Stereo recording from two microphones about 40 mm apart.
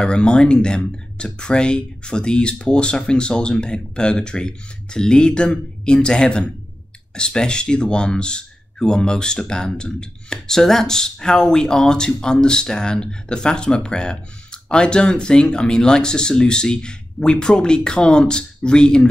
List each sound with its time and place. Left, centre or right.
0.0 s speech: left